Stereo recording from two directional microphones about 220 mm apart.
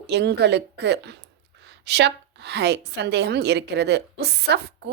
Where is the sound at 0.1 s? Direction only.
50° right (ahead or behind).